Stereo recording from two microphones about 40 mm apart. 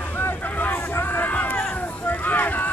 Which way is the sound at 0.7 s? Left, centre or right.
Left.